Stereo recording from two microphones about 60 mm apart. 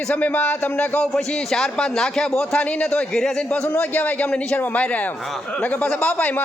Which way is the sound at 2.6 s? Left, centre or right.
Left.